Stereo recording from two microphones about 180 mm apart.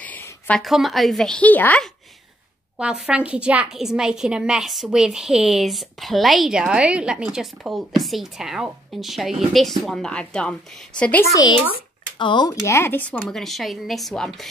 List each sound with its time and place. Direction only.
0.0 s a woman's voice: 10° left (ahead or behind)
2.8 s a woman's voice: 5° right (ahead or behind)
11.3 s speech: 25° left (ahead or behind)
12.6 s a woman's voice: 15° left (ahead or behind)